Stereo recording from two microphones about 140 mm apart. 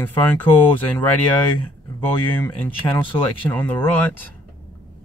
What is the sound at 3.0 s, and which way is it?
Speech, 15° left (ahead or behind).